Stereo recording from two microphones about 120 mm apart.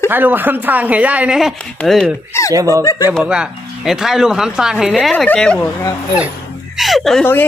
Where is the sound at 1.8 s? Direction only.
5° left (ahead or behind).